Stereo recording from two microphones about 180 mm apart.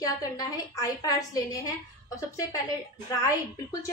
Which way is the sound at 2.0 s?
20° left (ahead or behind).